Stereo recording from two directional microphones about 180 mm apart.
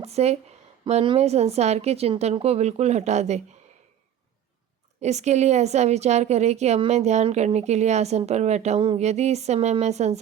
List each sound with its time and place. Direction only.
0.0 s a woman's voice: 35° right (ahead or behind)
4.9 s a woman's voice: 40° right (ahead or behind)